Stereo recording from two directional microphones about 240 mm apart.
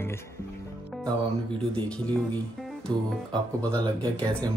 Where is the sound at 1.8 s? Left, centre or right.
Centre.